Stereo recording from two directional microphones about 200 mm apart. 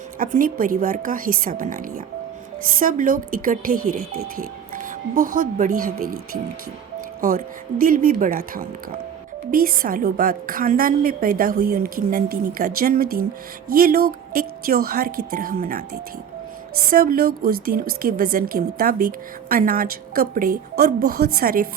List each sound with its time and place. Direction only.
0.2 s a woman's voice: 45° right (ahead or behind)
16.9 s a woman's voice: 45° right (ahead or behind)